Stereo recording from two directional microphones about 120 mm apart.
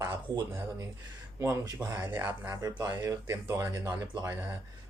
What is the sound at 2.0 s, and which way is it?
Speech, 15° right (ahead or behind).